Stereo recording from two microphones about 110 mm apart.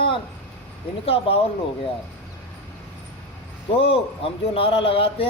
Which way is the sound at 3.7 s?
60° left (ahead or behind).